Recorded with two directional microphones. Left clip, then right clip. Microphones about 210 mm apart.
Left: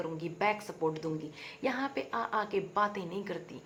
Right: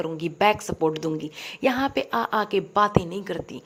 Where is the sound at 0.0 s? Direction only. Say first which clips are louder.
Right 10 dB; 40° right (ahead or behind).